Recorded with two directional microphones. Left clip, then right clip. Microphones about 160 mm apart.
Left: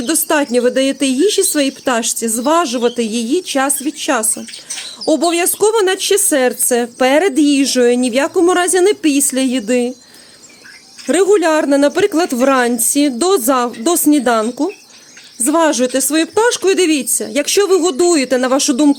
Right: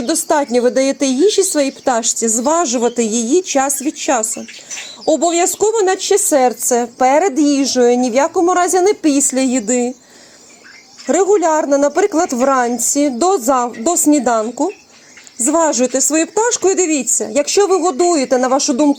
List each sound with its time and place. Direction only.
0.0 s speech: 15° left (ahead or behind)
11.0 s speech: 25° left (ahead or behind)